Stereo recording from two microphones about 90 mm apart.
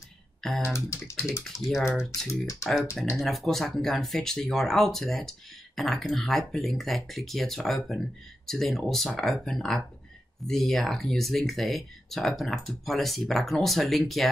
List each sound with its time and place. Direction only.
0.4 s speech: 5° left (ahead or behind)
0.7 s speech: 30° left (ahead or behind)
1.4 s speech: centre (ahead or behind)
2.0 s speech: 35° left (ahead or behind)
3.2 s speech: centre (ahead or behind)